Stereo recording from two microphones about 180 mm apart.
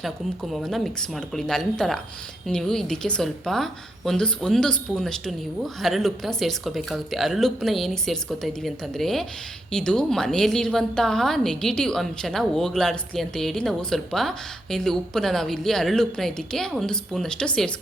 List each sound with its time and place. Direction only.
0.5 s a woman's voice: centre (ahead or behind)